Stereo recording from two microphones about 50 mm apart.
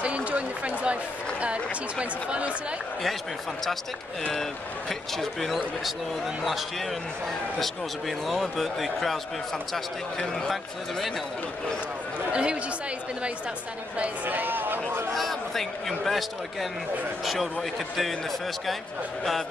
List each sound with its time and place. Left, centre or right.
0.0 s a sound: right
1.4 s speech: right
4.3 s speech: centre
10.1 s speech: centre
12.3 s speech: right
13.9 s speech: right
15.1 s a man's voice: centre